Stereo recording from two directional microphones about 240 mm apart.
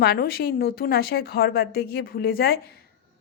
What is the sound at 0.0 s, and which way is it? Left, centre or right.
A woman's voice, left.